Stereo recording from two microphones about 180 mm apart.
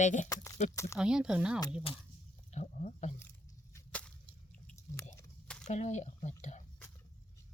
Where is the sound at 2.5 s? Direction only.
40° left (ahead or behind).